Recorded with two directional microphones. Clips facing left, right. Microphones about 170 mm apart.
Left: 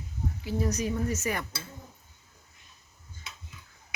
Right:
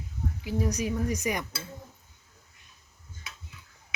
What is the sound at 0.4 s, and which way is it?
Speech, 10° right (ahead or behind).